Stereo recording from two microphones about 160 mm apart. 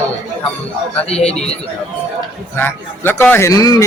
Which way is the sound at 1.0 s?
40° left (ahead or behind).